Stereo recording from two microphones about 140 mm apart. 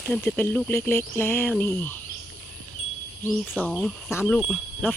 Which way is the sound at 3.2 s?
5° right (ahead or behind).